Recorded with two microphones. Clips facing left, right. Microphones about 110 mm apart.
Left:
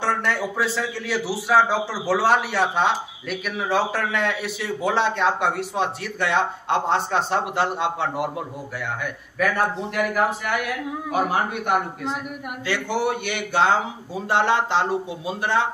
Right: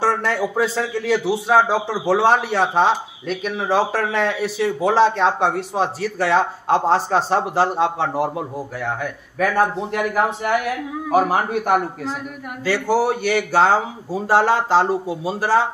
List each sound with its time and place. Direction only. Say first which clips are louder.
1.0 s a man's voice: right 8 dB; 25° right (ahead or behind)